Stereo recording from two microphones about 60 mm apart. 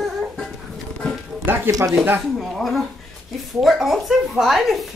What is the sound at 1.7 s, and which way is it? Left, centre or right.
Speech, right.